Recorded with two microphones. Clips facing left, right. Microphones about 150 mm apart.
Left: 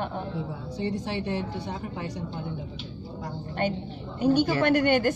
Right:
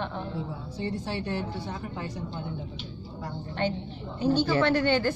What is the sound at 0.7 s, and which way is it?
A woman's voice, 15° left (ahead or behind).